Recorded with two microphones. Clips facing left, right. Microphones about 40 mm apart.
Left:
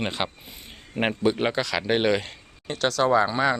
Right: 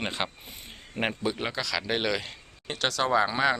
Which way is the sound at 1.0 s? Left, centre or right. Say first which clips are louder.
Left 6 dB; centre.